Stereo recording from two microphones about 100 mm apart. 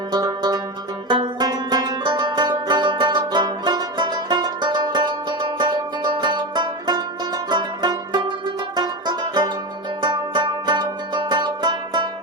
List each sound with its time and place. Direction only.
0.1 s zither: 45° right (ahead or behind)
1.4 s music: 40° right (ahead or behind)
8.7 s banjo: 45° right (ahead or behind)
10.0 s music: 50° right (ahead or behind)